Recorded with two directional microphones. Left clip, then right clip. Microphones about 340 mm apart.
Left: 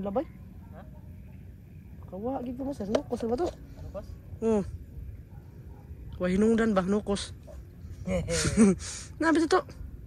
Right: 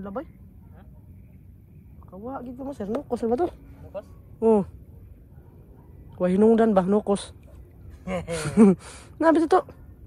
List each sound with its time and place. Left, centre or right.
0.0 s speech: centre
2.1 s speech: centre
3.1 s speech: right
4.4 s speech: centre
6.1 s speech: centre